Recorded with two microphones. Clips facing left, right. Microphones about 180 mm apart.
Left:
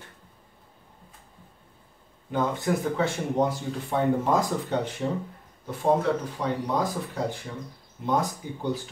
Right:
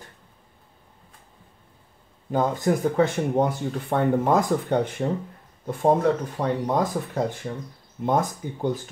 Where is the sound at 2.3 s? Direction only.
45° right (ahead or behind).